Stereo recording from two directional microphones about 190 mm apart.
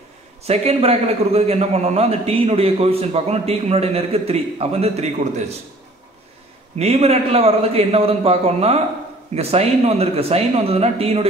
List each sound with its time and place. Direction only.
0.4 s a man's voice: 30° right (ahead or behind)
6.8 s a man's voice: 35° right (ahead or behind)